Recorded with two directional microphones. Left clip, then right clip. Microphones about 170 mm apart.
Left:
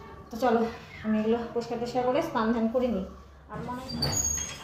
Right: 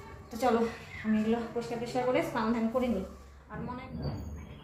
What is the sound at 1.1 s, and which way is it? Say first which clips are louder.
A woman's voice: left 4 dB; 20° left (ahead or behind).